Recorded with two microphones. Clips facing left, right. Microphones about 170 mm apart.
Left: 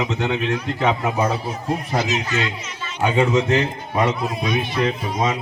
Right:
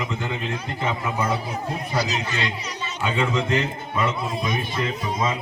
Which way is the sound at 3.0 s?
80° left.